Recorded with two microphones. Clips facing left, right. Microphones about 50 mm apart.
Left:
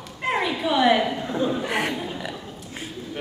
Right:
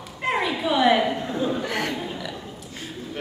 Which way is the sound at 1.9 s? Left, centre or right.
Centre.